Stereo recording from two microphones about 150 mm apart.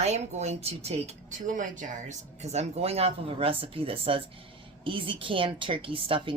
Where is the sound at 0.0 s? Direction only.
45° right (ahead or behind).